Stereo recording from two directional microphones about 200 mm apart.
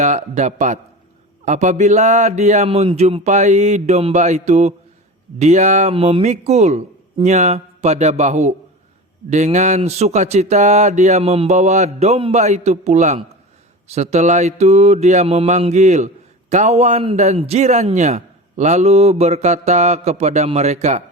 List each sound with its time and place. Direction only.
0.0 s mantra: 35° right (ahead or behind)